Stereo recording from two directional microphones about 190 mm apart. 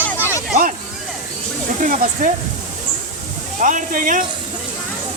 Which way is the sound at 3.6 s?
45° right (ahead or behind).